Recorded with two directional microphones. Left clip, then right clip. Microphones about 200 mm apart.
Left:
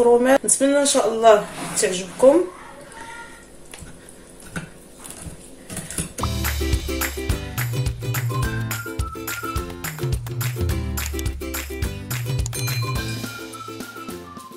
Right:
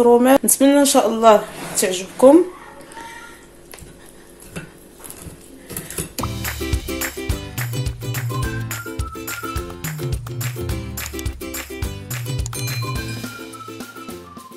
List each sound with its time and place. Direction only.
0.2 s speech: 40° right (ahead or behind)
6.1 s music: centre (ahead or behind)